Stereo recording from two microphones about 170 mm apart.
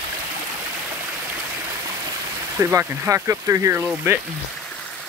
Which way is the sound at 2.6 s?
15° right (ahead or behind).